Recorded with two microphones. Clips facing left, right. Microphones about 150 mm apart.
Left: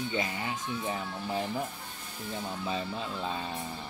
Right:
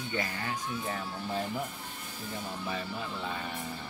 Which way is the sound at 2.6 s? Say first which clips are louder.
Left 3 dB; 20° left (ahead or behind).